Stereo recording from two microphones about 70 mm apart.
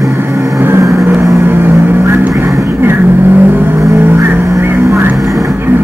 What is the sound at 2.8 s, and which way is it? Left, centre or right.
Vehicle, right.